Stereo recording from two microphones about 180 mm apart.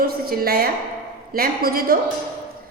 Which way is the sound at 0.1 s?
55° right (ahead or behind).